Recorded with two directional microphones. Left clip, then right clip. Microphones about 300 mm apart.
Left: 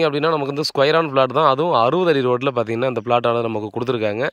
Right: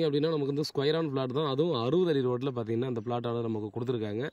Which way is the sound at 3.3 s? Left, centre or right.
Left.